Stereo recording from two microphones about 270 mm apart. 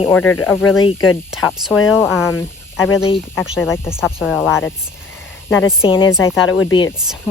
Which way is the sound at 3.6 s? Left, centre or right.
Centre.